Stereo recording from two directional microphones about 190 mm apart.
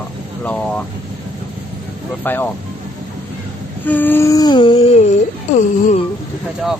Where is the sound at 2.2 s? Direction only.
10° left (ahead or behind).